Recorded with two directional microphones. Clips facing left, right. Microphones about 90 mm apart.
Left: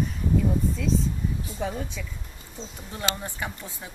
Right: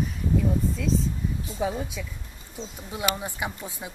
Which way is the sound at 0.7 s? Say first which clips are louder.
Even; centre (ahead or behind).